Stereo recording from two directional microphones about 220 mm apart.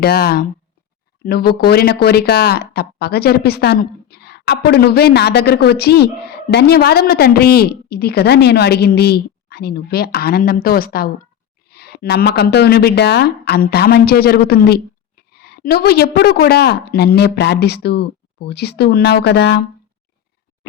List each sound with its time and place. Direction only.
0.0 s speech: 45° left (ahead or behind)